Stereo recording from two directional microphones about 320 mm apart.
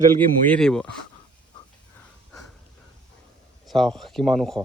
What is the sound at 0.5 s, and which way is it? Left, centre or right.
Speech, centre.